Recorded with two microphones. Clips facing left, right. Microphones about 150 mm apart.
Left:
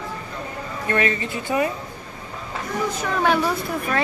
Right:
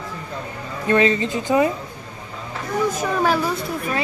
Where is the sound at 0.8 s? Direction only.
25° right (ahead or behind).